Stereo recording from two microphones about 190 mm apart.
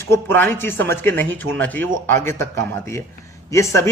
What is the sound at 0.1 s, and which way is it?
Speech, 10° left (ahead or behind).